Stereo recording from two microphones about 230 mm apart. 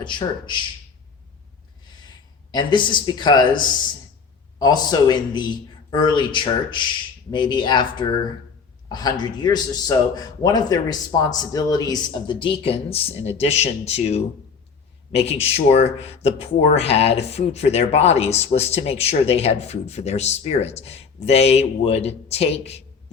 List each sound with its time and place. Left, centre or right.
0.0 s speech: left
1.9 s speech: centre